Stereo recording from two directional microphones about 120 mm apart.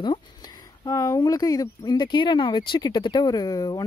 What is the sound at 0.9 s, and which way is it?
Speech, 25° left (ahead or behind).